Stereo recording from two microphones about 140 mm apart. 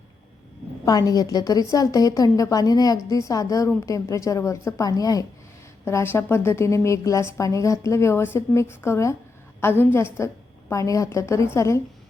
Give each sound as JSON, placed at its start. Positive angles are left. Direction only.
{"t": 0.9, "sound": "a woman's voice", "side_deg": 25}